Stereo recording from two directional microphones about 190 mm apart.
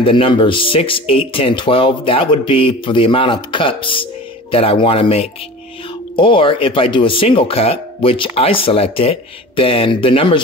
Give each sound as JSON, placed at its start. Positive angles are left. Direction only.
{"t": 0.0, "sound": "speech", "side_deg": 25}